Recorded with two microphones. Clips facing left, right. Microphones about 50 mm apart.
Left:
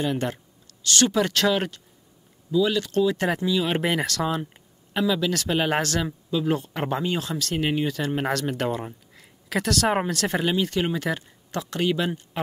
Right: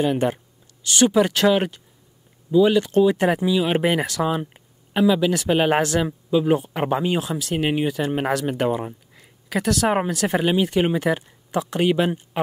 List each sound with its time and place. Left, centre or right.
0.0 s speech: centre
2.5 s speech: right